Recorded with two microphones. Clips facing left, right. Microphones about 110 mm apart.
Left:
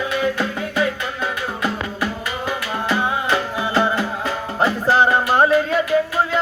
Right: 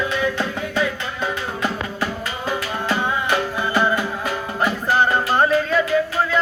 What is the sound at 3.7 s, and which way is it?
Music, 25° left (ahead or behind).